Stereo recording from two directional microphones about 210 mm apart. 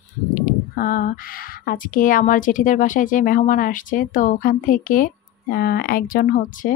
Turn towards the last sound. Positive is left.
turn(degrees=40)  # may be behind; listen again after turning